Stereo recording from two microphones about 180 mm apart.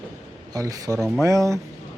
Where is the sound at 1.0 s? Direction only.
Centre (ahead or behind).